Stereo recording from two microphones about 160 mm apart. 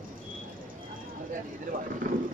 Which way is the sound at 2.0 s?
55° right (ahead or behind).